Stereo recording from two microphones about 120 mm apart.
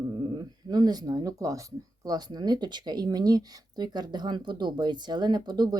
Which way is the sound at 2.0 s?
35° right (ahead or behind).